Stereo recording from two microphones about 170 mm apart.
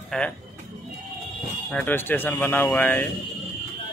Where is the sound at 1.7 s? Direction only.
10° left (ahead or behind).